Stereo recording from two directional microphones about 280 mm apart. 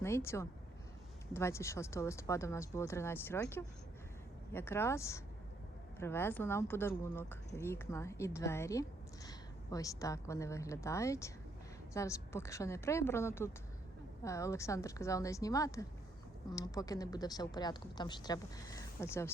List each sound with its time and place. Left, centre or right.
0.0 s speech: centre